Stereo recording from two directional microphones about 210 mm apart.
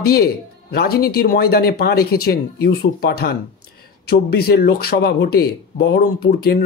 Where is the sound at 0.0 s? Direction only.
45° left (ahead or behind).